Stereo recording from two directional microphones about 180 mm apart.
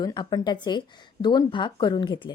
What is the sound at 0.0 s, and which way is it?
A woman's voice, 25° left (ahead or behind).